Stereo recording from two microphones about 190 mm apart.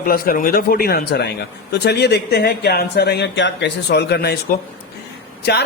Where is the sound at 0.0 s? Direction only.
50° left (ahead or behind).